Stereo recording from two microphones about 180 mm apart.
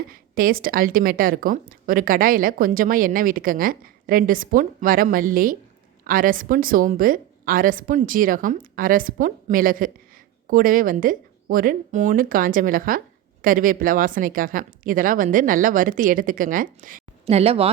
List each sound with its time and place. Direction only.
0.1 s a woman's voice: 55° right (ahead or behind)
17.2 s speech: 35° right (ahead or behind)